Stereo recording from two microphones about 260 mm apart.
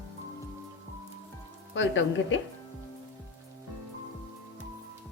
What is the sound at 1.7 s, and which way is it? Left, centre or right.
Speech, left.